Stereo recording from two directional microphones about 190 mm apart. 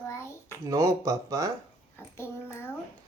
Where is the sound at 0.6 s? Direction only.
15° right (ahead or behind).